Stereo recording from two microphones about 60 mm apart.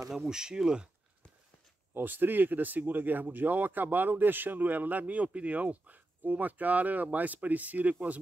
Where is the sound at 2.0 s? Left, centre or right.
Right.